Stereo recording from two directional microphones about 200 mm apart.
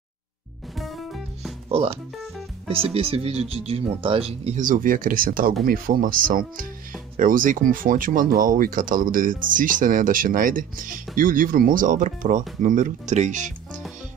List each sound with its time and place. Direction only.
0.7 s music: centre (ahead or behind)
1.7 s speech: 30° right (ahead or behind)